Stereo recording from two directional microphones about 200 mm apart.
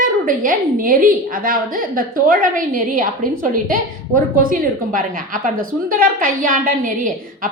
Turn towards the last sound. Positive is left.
turn(degrees=-40)  # may be behind; listen again after turning